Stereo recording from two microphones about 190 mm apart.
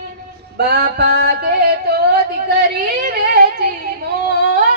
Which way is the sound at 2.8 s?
50° right (ahead or behind).